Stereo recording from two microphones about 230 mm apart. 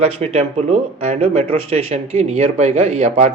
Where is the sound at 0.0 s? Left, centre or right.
Right.